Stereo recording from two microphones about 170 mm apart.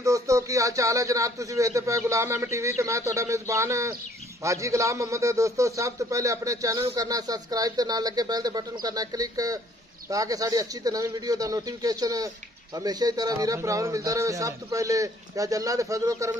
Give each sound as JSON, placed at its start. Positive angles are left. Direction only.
{"t": 0.0, "sound": "a man's voice", "side_deg": -20}